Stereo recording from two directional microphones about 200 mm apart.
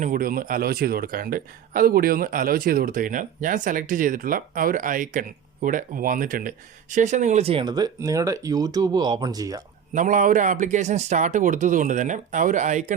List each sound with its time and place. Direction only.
0.0 s speech: 45° right (ahead or behind); by 9.6 s 20° right (ahead or behind)
9.9 s speech: 40° right (ahead or behind)